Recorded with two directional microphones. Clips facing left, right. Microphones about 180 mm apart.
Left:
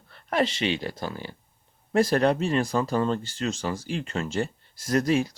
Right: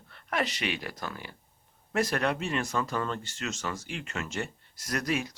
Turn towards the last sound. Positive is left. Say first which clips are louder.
# left 8 dB
turn(degrees=30)  # may be behind; listen again after turning